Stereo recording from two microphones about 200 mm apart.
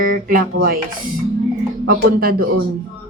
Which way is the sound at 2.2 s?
50° right (ahead or behind).